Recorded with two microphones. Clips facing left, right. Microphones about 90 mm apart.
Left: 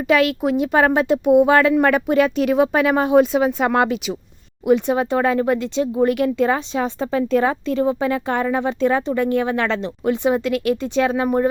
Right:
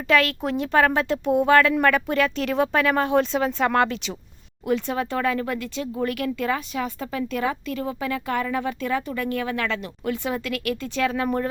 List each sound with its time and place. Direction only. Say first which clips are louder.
0.1 s speech: left 4 dB; 15° left (ahead or behind)